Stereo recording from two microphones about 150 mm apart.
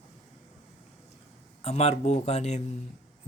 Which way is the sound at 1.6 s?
45° left (ahead or behind).